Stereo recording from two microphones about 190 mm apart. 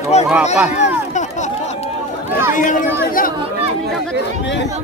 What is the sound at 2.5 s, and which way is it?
Speech, 45° left (ahead or behind).